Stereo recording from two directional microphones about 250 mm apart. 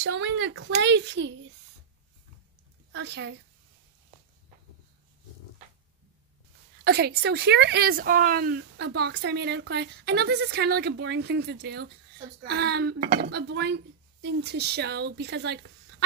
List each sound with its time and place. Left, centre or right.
0.0 s a woman's voice: right
2.9 s a woman's voice: right
6.8 s speech: right